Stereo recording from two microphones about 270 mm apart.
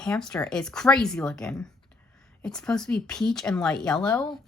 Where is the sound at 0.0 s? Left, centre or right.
Centre.